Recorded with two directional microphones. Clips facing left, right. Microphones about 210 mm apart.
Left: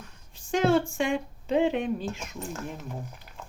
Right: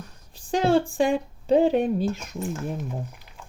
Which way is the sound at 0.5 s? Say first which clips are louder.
Right 2 dB; 30° right (ahead or behind).